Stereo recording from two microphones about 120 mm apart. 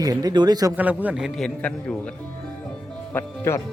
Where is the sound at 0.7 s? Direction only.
15° right (ahead or behind).